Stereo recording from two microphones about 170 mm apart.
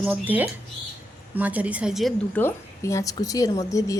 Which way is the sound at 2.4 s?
15° left (ahead or behind).